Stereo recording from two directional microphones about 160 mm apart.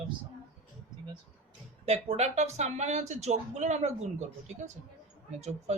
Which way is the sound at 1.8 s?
40° right (ahead or behind).